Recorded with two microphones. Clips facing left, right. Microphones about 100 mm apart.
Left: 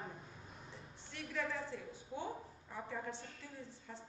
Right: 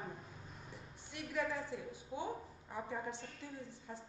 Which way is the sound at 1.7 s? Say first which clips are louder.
Right 2 dB; 15° right (ahead or behind).